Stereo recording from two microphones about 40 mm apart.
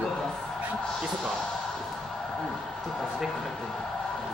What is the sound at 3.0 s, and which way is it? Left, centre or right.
Speech, centre.